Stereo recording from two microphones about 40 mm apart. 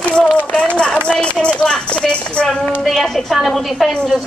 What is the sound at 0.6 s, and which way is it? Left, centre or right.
Speech, left.